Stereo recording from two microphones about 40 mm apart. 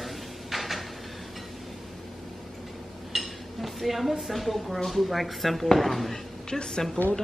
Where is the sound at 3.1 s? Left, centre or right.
Centre.